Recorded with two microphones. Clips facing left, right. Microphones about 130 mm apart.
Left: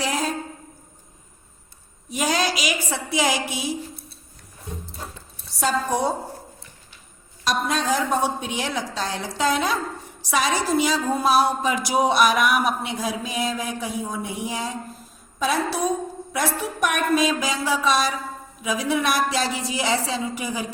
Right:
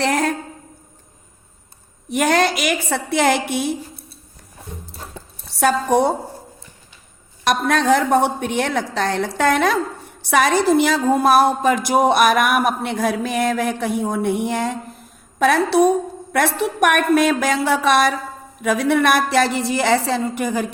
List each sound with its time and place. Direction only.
0.0 s a sound: 60° right (ahead or behind)
2.0 s speech: 60° right (ahead or behind)
5.5 s a woman's voice: 65° right (ahead or behind)
7.4 s speech: 60° right (ahead or behind)